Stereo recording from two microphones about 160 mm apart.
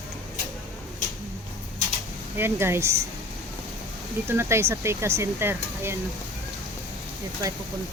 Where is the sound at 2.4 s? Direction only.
15° right (ahead or behind).